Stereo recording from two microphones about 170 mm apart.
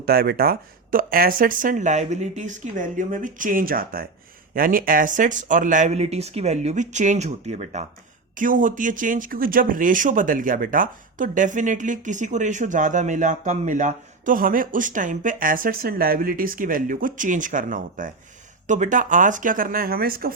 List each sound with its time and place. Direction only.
0.0 s speech: 65° right (ahead or behind)